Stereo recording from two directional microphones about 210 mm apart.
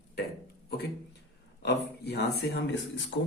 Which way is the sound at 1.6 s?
50° left (ahead or behind).